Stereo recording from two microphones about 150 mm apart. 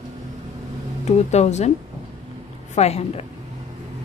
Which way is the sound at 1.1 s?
50° left (ahead or behind).